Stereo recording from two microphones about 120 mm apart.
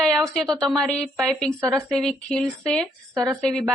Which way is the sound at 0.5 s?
Centre (ahead or behind).